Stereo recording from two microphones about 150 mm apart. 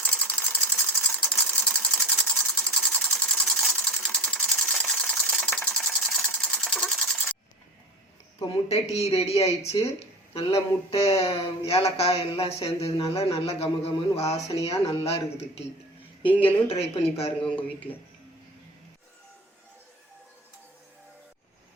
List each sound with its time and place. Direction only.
0.0 s sewing machine: 10° left (ahead or behind)
8.7 s speech: 45° left (ahead or behind)
16.6 s speech: 40° left (ahead or behind)
17.4 s a man's voice: 10° left (ahead or behind)